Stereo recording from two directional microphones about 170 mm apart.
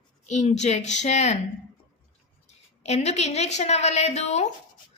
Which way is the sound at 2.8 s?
40° left (ahead or behind).